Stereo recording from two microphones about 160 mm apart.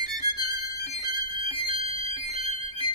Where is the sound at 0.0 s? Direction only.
25° right (ahead or behind).